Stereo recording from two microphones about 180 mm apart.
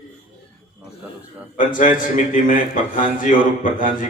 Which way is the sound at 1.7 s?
50° left (ahead or behind).